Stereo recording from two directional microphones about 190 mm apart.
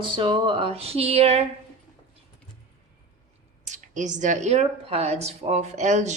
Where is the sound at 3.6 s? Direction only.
40° right (ahead or behind).